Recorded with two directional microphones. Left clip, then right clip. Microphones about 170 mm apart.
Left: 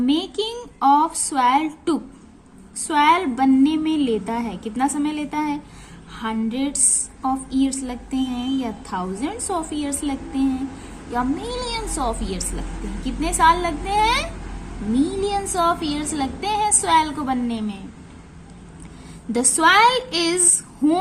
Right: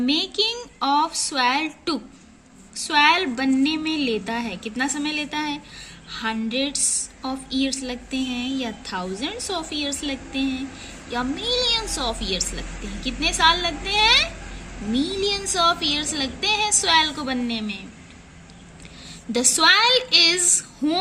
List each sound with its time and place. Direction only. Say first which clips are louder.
0.0 s a woman's voice: right 1 dB; 15° right (ahead or behind)
19.3 s a woman's voice: left 1 dB; 15° right (ahead or behind)